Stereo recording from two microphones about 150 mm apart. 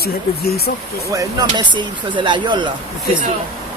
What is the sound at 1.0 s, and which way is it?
Speech, 20° right (ahead or behind).